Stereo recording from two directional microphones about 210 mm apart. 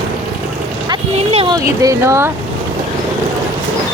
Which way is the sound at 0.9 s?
30° right (ahead or behind).